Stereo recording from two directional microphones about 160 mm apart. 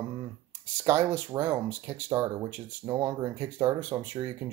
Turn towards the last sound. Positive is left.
turn(degrees=-25)  # may be behind; listen again after turning